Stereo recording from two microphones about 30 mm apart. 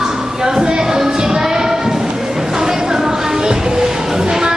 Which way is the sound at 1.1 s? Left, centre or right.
Right.